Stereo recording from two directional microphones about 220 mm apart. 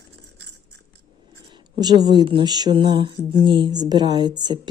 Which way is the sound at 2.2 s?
20° right (ahead or behind).